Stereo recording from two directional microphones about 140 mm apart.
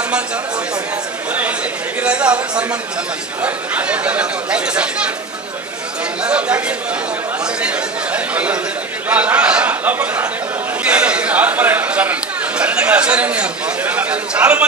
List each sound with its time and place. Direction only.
2.0 s speech: 10° right (ahead or behind)
6.2 s speech: 10° right (ahead or behind)
7.6 s speech: 10° right (ahead or behind)